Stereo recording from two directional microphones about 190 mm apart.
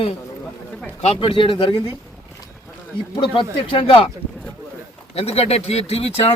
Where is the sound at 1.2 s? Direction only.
25° left (ahead or behind).